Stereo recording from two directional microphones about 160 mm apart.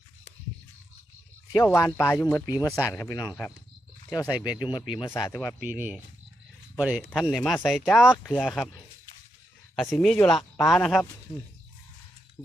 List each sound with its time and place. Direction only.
1.5 s speech: 20° left (ahead or behind)
5.0 s speech: 15° left (ahead or behind)
5.6 s speech: 10° right (ahead or behind)
7.1 s speech: 5° left (ahead or behind)
9.9 s speech: centre (ahead or behind)